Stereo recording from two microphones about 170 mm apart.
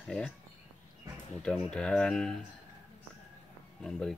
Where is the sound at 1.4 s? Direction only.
5° left (ahead or behind).